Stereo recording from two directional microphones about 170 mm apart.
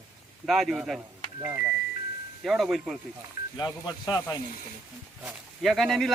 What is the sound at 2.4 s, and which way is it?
Speech, centre (ahead or behind).